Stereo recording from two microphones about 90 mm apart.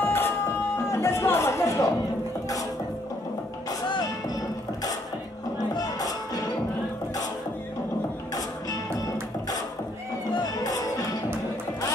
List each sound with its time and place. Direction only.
0.0 s music: 25° left (ahead or behind)
0.8 s chatter: 30° left (ahead or behind)
5.8 s music: 45° left (ahead or behind)
8.4 s music: 45° left (ahead or behind)
10.3 s music: 45° left (ahead or behind)